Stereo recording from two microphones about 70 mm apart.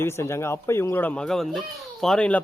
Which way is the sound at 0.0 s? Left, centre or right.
Left.